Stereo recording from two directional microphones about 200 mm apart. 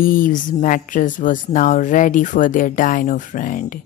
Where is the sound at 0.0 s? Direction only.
45° left (ahead or behind).